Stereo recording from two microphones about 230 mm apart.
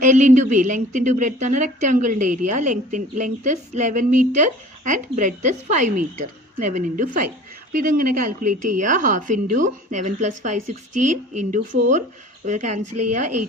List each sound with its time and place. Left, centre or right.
0.0 s a woman's voice: right
12.8 s speech: right